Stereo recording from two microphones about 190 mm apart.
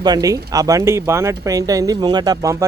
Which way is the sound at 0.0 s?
20° right (ahead or behind).